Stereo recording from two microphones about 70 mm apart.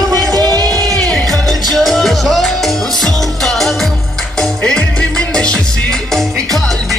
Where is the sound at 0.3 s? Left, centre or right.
Right.